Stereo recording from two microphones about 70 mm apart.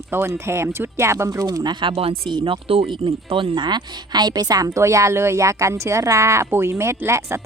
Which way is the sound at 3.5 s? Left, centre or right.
Right.